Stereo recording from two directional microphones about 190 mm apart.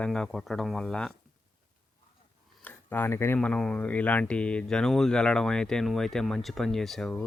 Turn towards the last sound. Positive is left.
turn(degrees=0)  # may be behind; listen again after turning